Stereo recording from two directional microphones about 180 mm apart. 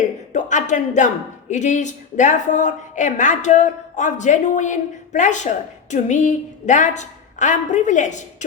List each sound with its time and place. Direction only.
0.3 s speech: 45° left (ahead or behind)